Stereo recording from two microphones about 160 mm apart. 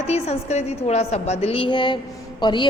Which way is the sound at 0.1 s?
40° left (ahead or behind).